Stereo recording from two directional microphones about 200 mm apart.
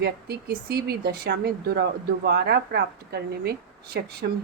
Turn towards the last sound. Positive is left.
turn(degrees=-50)  # may be behind; listen again after turning